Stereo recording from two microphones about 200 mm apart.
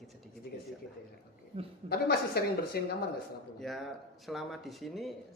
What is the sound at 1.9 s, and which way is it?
Speech, 50° left (ahead or behind).